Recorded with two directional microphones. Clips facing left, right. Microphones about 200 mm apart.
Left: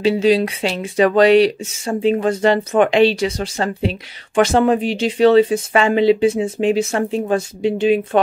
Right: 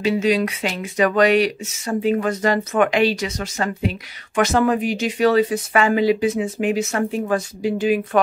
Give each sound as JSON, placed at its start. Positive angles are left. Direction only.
{"t": 0.0, "sound": "speech", "side_deg": 30}